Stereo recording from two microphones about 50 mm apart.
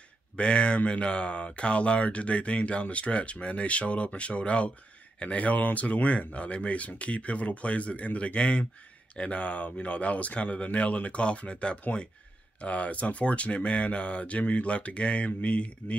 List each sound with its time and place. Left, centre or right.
0.4 s speech: left